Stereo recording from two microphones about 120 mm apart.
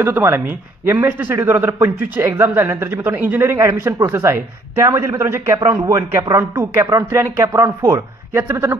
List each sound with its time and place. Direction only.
0.0 s a man's voice: 20° right (ahead or behind)